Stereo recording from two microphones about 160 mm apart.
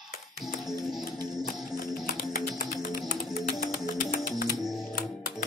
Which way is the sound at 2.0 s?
50° left (ahead or behind).